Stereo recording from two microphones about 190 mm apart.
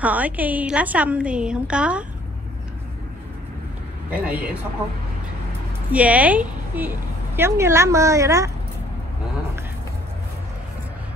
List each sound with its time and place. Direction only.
0.0 s a woman's voice: 10° right (ahead or behind)
4.1 s a woman's voice: 10° right (ahead or behind)
5.9 s a woman's voice: 5° right (ahead or behind)